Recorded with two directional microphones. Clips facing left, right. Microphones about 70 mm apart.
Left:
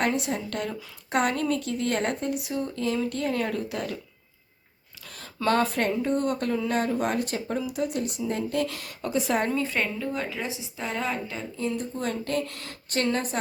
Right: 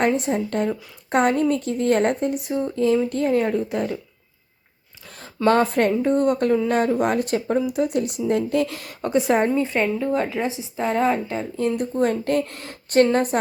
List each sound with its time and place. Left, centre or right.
0.0 s speech: right
5.0 s speech: right
7.9 s a woman's voice: right
9.6 s speech: right
10.1 s speech: right